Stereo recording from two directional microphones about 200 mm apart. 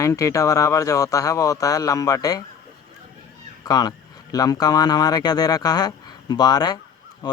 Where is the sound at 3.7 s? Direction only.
20° left (ahead or behind).